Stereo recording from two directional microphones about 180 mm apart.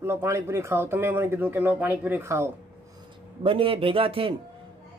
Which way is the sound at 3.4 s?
30° right (ahead or behind).